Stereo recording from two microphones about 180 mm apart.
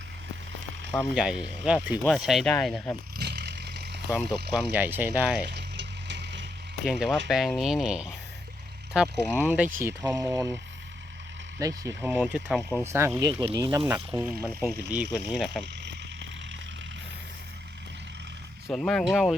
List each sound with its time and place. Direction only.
0.9 s speech: 5° right (ahead or behind)
3.2 s a sound: 65° right (ahead or behind)
4.1 s speech: 5° left (ahead or behind)
4.5 s speech: 10° right (ahead or behind)
5.5 s a sound: 70° right (ahead or behind)
6.8 s speech: centre (ahead or behind)
10.2 s speech: 15° right (ahead or behind)
11.6 s speech: 20° right (ahead or behind)
12.7 s speech: 15° right (ahead or behind); by 15.6 s centre (ahead or behind)
18.7 s speech: 5° left (ahead or behind)